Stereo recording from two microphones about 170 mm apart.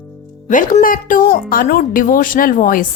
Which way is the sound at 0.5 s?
50° left (ahead or behind).